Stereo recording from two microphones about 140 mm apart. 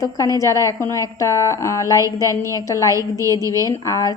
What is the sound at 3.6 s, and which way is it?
Speech, 20° left (ahead or behind).